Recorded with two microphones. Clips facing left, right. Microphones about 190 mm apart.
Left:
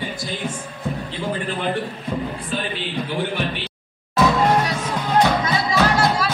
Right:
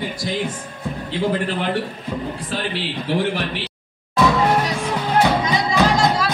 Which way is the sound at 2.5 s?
80° right.